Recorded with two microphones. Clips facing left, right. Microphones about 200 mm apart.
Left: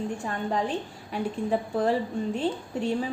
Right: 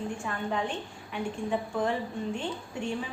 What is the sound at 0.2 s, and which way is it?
A woman's voice, 35° left (ahead or behind).